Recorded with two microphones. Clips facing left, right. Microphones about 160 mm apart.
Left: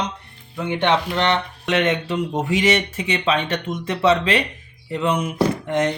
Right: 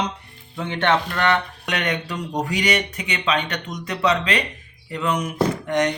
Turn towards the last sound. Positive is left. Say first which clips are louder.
# left 1 dB
turn(degrees=30)  # may be behind; listen again after turning